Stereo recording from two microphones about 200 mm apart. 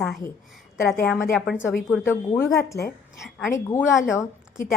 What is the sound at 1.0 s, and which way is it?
A woman's voice, 10° left (ahead or behind).